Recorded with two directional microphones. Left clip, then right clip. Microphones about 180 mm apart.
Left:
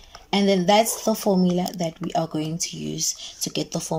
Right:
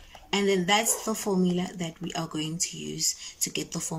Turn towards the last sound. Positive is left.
turn(degrees=25)  # may be behind; listen again after turning